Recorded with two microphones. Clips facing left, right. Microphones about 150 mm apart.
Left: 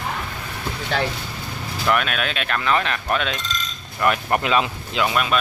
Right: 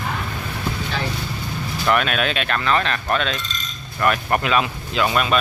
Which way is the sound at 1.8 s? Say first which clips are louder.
Right 2 dB; centre (ahead or behind).